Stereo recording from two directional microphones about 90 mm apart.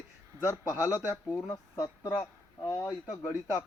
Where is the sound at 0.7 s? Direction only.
25° right (ahead or behind).